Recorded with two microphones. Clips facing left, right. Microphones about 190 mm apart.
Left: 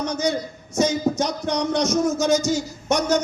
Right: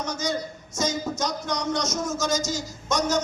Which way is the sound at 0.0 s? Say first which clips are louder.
Left 5 dB; 60° left (ahead or behind).